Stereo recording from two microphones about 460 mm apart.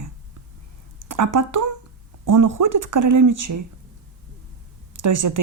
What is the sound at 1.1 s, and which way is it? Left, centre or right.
Speech, right.